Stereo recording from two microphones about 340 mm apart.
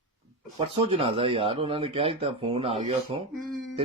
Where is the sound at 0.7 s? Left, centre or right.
Centre.